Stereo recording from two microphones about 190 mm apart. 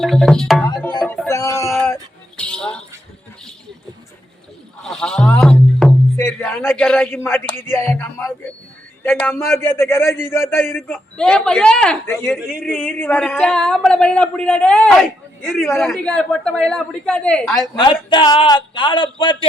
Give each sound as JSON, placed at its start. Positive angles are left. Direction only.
{"t": 0.0, "sound": "speech", "side_deg": 0}
{"t": 1.0, "sound": "music", "side_deg": 5}
{"t": 1.3, "sound": "a sound", "side_deg": 15}
{"t": 1.6, "sound": "music", "side_deg": 0}
{"t": 4.8, "sound": "music", "side_deg": 5}
{"t": 6.1, "sound": "a man's voice", "side_deg": 15}
{"t": 12.3, "sound": "speech", "side_deg": -5}
{"t": 12.7, "sound": "speech", "side_deg": 10}
{"t": 17.7, "sound": "a man's voice", "side_deg": 25}